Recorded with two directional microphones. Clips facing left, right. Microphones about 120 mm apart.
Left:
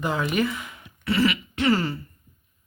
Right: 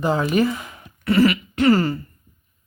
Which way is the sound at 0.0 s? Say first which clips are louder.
Right 5 dB; 35° right (ahead or behind).